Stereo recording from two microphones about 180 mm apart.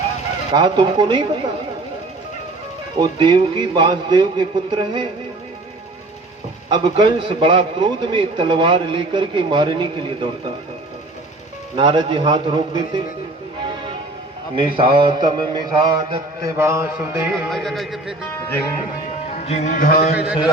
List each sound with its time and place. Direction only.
0.5 s a man's voice: 25° right (ahead or behind)
3.0 s a man's voice: 25° right (ahead or behind)
6.7 s a man's voice: 25° right (ahead or behind)
11.8 s a man's voice: 25° right (ahead or behind)
14.5 s a man's voice: 30° right (ahead or behind)
17.5 s a man's voice: centre (ahead or behind)
19.5 s music: 40° left (ahead or behind)
20.1 s a man's voice: 5° right (ahead or behind)